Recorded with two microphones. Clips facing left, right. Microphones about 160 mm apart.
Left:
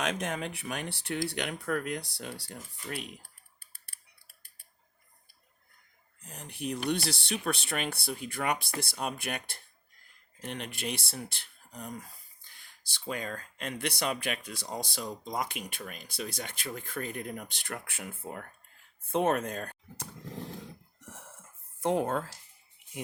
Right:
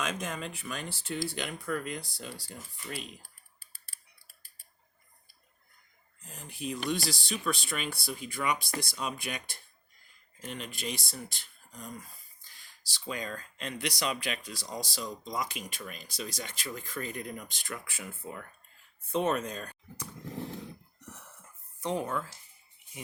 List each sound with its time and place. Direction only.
0.0 s speech: 65° left (ahead or behind)
6.2 s speech: 70° left (ahead or behind)
21.0 s cough: 50° left (ahead or behind)
21.9 s speech: 70° left (ahead or behind)